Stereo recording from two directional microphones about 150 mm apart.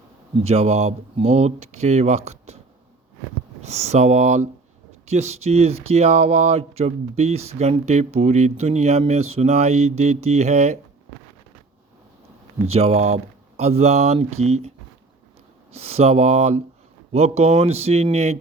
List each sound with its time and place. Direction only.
0.4 s speech: 45° right (ahead or behind)
3.6 s speech: 45° right (ahead or behind)
12.7 s speech: 45° right (ahead or behind)
15.7 s speech: 45° right (ahead or behind)